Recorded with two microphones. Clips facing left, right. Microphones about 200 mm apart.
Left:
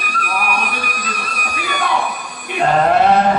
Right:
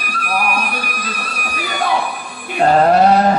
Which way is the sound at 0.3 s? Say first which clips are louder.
Right 2 dB; 40° right (ahead or behind).